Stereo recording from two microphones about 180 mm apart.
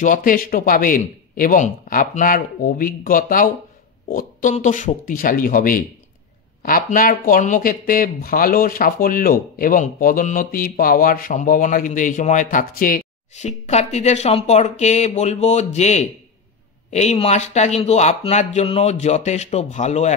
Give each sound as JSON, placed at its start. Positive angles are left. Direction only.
{"t": 0.0, "sound": "speech", "side_deg": 45}